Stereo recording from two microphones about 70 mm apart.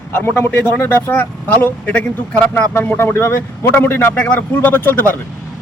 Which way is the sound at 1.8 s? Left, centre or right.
Centre.